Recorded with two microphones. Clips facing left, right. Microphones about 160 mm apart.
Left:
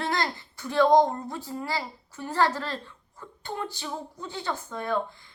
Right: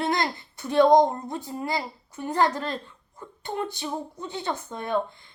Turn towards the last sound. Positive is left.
turn(degrees=-20)  # may be behind; listen again after turning